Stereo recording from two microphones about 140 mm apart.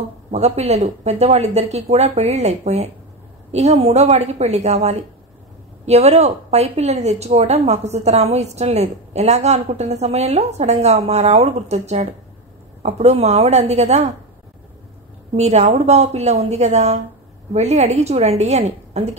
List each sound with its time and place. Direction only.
0.3 s a woman's voice: 50° right (ahead or behind)
15.3 s a woman's voice: 50° right (ahead or behind)